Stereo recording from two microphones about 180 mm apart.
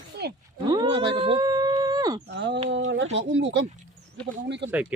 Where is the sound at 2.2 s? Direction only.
80° right.